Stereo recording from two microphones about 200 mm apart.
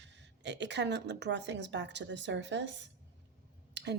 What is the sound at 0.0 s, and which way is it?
Speech, 60° right (ahead or behind).